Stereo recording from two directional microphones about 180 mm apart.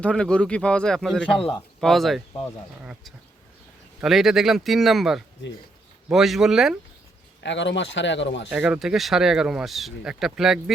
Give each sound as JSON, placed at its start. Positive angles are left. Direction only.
{"t": 0.0, "sound": "speech", "side_deg": 5}
{"t": 7.4, "sound": "speech", "side_deg": 85}
{"t": 8.4, "sound": "speech", "side_deg": -5}